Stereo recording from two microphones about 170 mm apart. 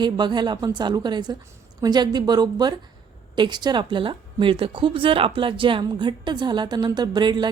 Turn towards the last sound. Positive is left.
turn(degrees=-25)  # may be behind; listen again after turning